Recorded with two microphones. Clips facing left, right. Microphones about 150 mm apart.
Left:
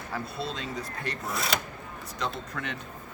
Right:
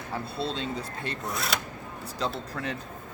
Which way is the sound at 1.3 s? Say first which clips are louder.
Left 2 dB; centre (ahead or behind).